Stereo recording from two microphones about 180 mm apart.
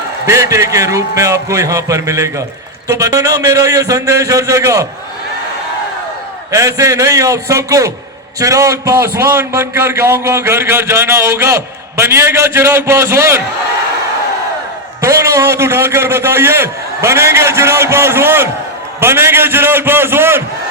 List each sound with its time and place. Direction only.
0.3 s a man's voice: 15° right (ahead or behind)
6.5 s a man's voice: 15° right (ahead or behind)
15.0 s a man's voice: 15° right (ahead or behind)